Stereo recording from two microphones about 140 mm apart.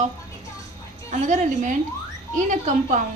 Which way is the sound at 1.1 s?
60° right (ahead or behind).